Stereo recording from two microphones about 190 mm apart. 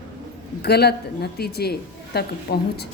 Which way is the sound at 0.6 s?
55° left (ahead or behind).